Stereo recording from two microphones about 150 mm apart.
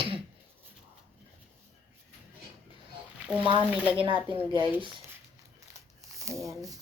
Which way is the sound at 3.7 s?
10° right (ahead or behind).